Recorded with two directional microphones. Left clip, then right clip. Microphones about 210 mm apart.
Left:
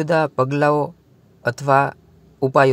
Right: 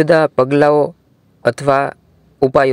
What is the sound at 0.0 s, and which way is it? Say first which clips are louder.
Speech: right 7 dB; 20° right (ahead or behind).